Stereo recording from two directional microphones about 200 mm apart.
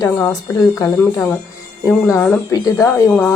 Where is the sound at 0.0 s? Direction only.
15° left (ahead or behind).